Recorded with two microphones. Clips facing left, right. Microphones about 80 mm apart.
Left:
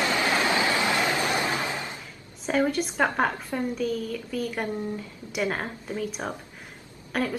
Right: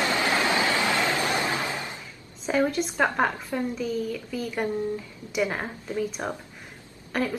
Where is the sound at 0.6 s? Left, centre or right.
Left.